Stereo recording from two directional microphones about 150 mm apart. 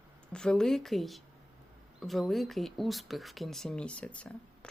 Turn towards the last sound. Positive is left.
turn(degrees=10)  # may be behind; listen again after turning